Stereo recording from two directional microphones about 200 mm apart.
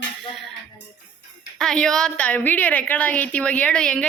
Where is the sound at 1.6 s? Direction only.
5° left (ahead or behind).